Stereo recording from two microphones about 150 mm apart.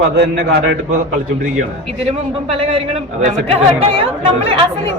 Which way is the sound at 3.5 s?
40° right (ahead or behind).